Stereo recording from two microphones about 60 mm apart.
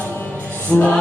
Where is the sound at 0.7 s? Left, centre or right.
Left.